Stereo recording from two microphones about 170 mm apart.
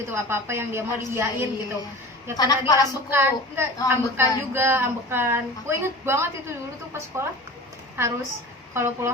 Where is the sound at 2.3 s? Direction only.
25° left (ahead or behind).